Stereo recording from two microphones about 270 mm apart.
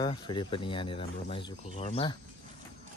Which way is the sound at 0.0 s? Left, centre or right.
Centre.